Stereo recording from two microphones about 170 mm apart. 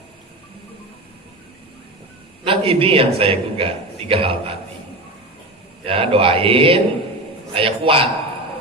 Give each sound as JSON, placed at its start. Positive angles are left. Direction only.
{"t": 2.4, "sound": "a man's voice", "side_deg": -30}
{"t": 5.8, "sound": "a man's voice", "side_deg": -35}